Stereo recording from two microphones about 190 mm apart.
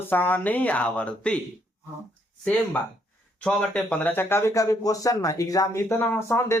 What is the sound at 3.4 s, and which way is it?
Speech, 5° left (ahead or behind).